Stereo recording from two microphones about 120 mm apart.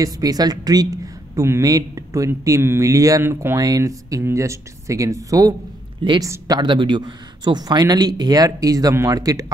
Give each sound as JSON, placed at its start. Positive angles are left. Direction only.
{"t": 0.0, "sound": "speech", "side_deg": -30}